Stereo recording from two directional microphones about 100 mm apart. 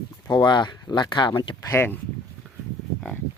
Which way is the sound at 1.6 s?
35° left (ahead or behind).